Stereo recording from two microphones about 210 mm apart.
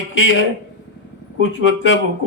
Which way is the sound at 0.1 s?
70° left (ahead or behind).